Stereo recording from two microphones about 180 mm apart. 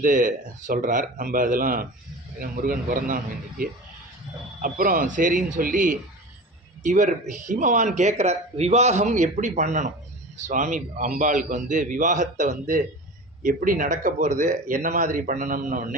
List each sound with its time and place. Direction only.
0.0 s speech: 50° right (ahead or behind)